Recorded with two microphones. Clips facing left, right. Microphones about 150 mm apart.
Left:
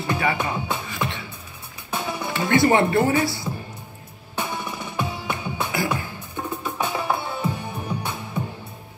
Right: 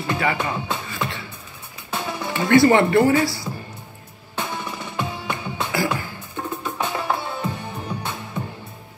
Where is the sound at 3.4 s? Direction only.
10° left (ahead or behind).